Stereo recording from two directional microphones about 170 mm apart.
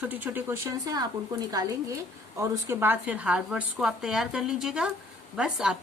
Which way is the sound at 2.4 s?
15° right (ahead or behind).